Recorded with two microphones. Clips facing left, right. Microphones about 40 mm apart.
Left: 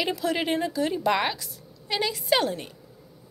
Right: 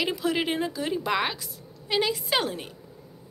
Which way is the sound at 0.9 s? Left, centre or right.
Centre.